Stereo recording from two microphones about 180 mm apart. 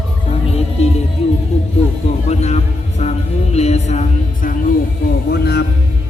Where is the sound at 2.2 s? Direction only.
40° left (ahead or behind).